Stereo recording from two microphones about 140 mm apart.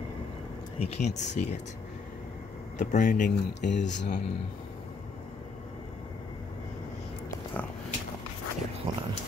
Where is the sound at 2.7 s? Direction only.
65° left (ahead or behind).